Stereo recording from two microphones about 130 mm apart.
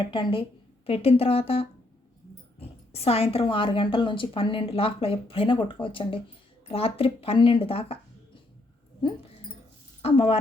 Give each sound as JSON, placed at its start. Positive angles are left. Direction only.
{"t": 0.1, "sound": "a woman's voice", "side_deg": 40}
{"t": 10.0, "sound": "a woman's voice", "side_deg": 50}